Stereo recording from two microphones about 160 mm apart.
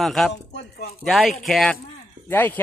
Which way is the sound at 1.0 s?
Centre (ahead or behind).